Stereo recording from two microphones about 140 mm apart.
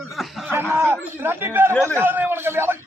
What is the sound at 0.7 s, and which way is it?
A man's voice, 15° right (ahead or behind).